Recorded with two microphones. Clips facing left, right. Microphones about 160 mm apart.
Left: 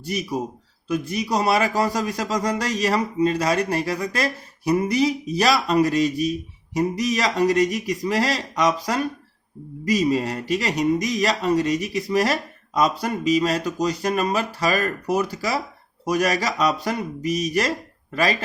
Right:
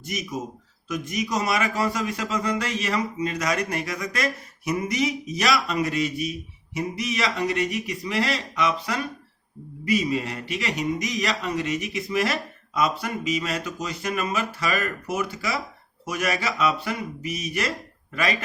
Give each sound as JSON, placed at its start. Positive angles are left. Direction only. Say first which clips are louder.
{"t": 0.0, "sound": "speech", "louder": "left 5 dB", "side_deg": 35}